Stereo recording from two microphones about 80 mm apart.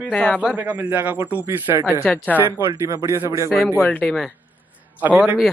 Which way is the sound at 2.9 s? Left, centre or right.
Right.